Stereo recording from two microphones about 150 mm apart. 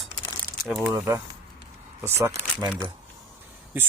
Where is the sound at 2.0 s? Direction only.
15° right (ahead or behind).